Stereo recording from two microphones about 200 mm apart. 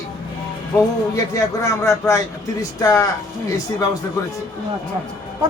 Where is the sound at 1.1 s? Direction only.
15° left (ahead or behind).